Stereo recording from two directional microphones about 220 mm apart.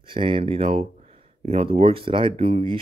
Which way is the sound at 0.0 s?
25° right (ahead or behind).